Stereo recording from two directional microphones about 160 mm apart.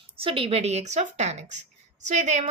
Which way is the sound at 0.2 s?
35° right (ahead or behind).